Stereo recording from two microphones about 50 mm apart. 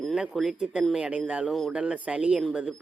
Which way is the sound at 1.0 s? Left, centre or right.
Right.